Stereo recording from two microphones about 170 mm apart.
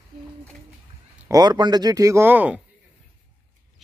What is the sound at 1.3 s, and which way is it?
Speech, 25° right (ahead or behind).